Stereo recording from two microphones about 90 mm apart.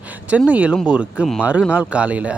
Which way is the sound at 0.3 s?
15° right (ahead or behind).